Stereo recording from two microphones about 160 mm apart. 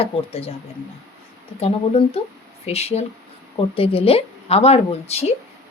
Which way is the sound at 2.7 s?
40° left (ahead or behind).